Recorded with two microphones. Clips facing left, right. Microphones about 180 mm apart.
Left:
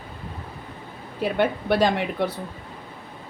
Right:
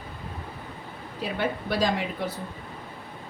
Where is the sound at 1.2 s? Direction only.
60° left (ahead or behind).